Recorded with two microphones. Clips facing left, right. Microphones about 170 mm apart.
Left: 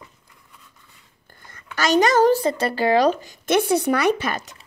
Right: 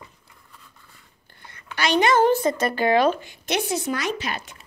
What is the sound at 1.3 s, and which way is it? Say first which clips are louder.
Speech: right 1 dB; 45° left (ahead or behind).